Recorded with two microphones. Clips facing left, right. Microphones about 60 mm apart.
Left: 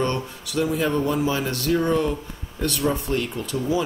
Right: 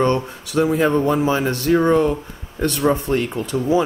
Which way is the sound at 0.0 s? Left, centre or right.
Right.